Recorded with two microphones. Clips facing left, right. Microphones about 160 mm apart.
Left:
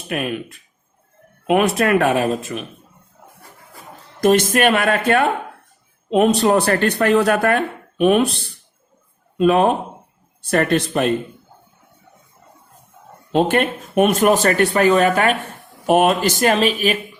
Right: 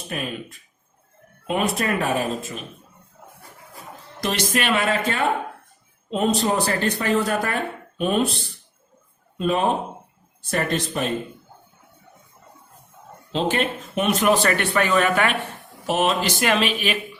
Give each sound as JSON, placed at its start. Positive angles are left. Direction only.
{"t": 0.1, "sound": "speech", "side_deg": 65}
{"t": 1.5, "sound": "speech", "side_deg": 70}
{"t": 4.2, "sound": "speech", "side_deg": 50}
{"t": 9.4, "sound": "speech", "side_deg": 65}
{"t": 13.3, "sound": "speech", "side_deg": 55}
{"t": 15.9, "sound": "speech", "side_deg": 55}
{"t": 16.4, "sound": "speech", "side_deg": 40}